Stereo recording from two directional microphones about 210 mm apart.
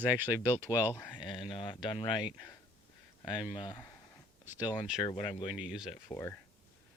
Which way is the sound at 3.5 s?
20° left (ahead or behind).